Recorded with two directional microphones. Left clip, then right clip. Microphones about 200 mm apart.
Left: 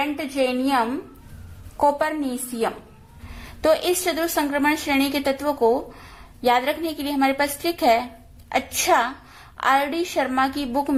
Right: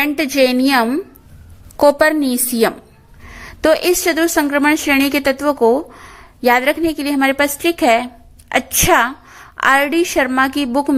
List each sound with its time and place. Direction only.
0.0 s a woman's voice: 50° right (ahead or behind)
3.3 s a woman's voice: 40° right (ahead or behind)